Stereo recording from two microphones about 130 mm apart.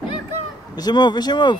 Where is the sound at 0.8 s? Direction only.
30° left (ahead or behind).